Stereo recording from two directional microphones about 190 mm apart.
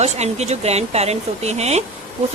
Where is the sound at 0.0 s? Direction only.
35° right (ahead or behind).